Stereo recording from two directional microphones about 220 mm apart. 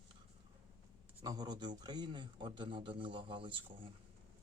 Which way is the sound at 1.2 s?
20° right (ahead or behind).